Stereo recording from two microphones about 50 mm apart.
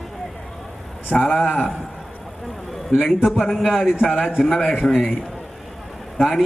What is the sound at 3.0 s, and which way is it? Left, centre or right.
A man's voice, centre.